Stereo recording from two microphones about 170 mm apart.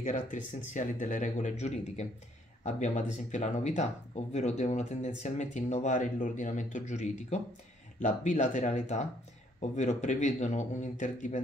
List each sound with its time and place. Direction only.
0.0 s speech: 45° left (ahead or behind)